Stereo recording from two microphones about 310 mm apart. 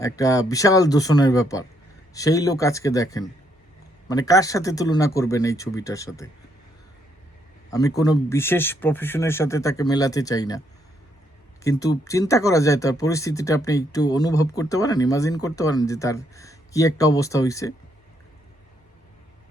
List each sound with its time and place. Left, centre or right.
0.0 s speech: centre
7.7 s speech: centre
11.6 s speech: centre